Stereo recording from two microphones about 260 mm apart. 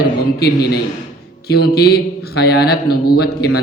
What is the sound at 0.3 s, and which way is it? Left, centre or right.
A man's voice, left.